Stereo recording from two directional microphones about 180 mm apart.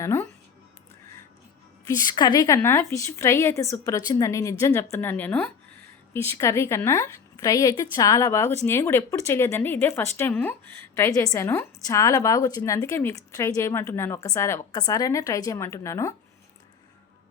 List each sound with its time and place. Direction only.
0.0 s speech: 15° left (ahead or behind)
1.9 s a woman's voice: 20° left (ahead or behind)